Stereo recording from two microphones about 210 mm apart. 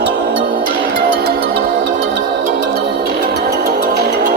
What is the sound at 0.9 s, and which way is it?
Music, 50° right (ahead or behind).